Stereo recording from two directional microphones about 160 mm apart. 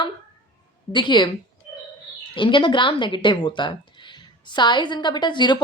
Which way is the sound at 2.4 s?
30° left (ahead or behind).